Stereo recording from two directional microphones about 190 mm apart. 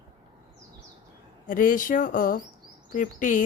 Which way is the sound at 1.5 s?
45° left (ahead or behind).